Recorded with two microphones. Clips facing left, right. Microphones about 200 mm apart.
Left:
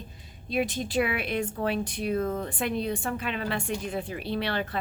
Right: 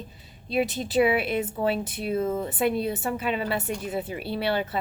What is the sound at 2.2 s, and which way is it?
Speech, 20° right (ahead or behind).